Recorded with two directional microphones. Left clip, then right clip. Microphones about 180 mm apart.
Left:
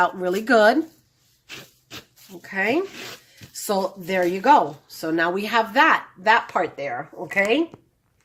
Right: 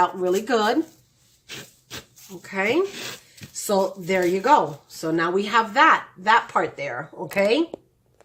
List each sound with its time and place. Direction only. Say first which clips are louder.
0.0 s speech: even; 35° left (ahead or behind)
1.5 s a sound: right 1 dB; centre (ahead or behind)
2.4 s speech: even; 30° left (ahead or behind)
7.3 s speech: even; 10° left (ahead or behind)